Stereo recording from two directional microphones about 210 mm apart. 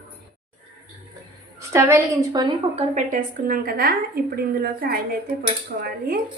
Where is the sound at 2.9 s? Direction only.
40° right (ahead or behind).